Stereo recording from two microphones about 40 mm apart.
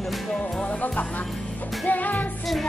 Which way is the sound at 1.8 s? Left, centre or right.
Left.